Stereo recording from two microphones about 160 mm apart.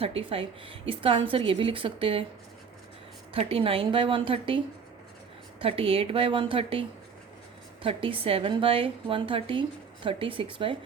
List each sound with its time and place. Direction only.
0.0 s a woman's voice: 35° right (ahead or behind)
3.3 s a woman's voice: 35° right (ahead or behind)